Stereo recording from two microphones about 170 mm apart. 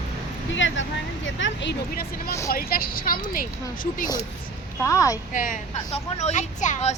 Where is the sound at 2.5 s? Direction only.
60° left (ahead or behind).